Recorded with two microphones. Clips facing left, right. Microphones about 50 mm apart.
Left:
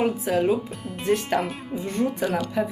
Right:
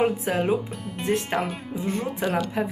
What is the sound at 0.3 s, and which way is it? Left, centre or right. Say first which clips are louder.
Speech: left 2 dB; right.